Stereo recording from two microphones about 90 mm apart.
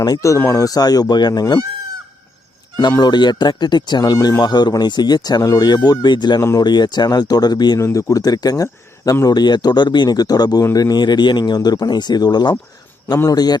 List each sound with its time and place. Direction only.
0.0 s speech: 40° left (ahead or behind)
3.0 s speech: 55° left (ahead or behind)
7.8 s speech: 35° left (ahead or behind)
9.2 s speech: 50° left (ahead or behind)